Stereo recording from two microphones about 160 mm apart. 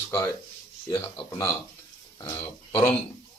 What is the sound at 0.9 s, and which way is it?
Speech, 30° left (ahead or behind).